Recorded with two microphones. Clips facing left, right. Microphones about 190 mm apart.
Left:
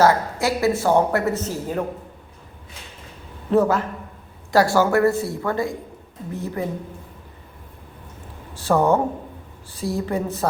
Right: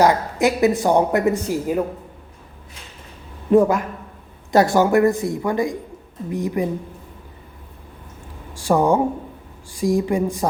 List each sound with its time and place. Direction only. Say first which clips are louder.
0.0 s speech: right 2 dB; 20° right (ahead or behind)
3.5 s speech: right 3 dB; 15° right (ahead or behind)
8.5 s speech: right 1 dB; 15° right (ahead or behind)